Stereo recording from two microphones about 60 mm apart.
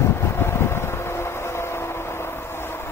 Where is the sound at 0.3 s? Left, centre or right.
Left.